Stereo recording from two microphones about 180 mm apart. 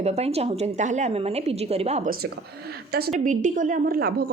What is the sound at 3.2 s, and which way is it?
A woman's voice, 45° right (ahead or behind).